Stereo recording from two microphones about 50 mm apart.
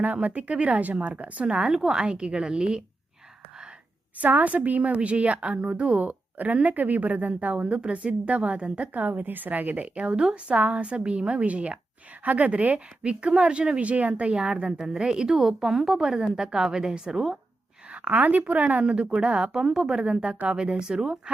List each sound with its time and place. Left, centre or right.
0.0 s a woman's voice: right
1.5 s a woman's voice: centre
4.2 s a woman's voice: right; by 17.3 s centre
17.9 s a woman's voice: right